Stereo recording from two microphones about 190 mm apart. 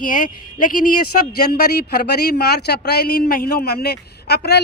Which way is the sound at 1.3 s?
55° left (ahead or behind).